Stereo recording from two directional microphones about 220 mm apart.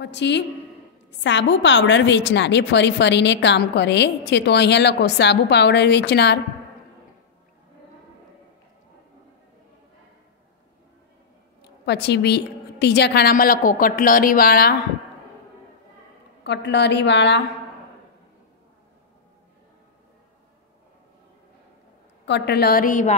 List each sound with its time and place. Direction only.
0.0 s a woman's voice: 50° left (ahead or behind)
11.6 s a woman's voice: 50° left (ahead or behind)
16.4 s a woman's voice: 50° left (ahead or behind)
22.2 s a woman's voice: 50° left (ahead or behind)